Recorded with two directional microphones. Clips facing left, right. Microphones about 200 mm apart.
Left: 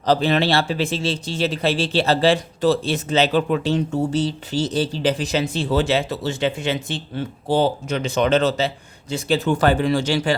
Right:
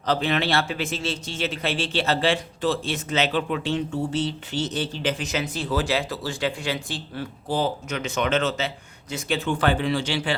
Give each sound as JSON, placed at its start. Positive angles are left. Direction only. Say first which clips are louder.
{"t": 0.0, "sound": "a man's voice", "louder": "left 5 dB", "side_deg": 35}